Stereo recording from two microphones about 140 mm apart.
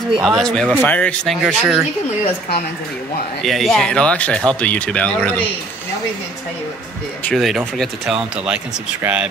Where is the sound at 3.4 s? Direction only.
5° left (ahead or behind).